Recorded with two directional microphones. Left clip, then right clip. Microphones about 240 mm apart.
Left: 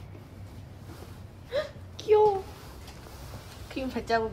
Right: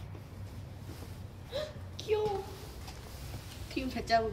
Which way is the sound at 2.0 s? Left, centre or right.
Left.